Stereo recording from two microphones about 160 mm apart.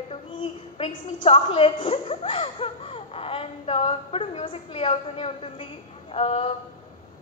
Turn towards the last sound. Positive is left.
turn(degrees=35)  # may be behind; listen again after turning